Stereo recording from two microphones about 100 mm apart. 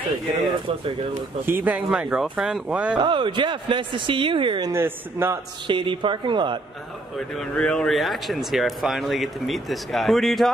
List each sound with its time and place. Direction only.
1.4 s speech: 20° right (ahead or behind)
3.0 s speech: 55° right (ahead or behind)
4.7 s speech: 25° right (ahead or behind)
5.7 s speech: 55° right (ahead or behind)
7.2 s speech: 5° left (ahead or behind)